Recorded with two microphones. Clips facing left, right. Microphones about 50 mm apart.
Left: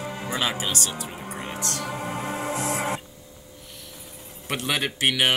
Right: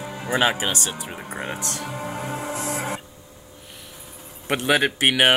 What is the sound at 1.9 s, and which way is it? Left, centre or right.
Music, left.